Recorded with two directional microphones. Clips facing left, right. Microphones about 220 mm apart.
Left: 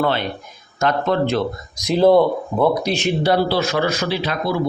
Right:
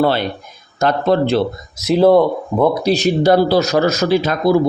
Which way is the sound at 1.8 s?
5° right (ahead or behind).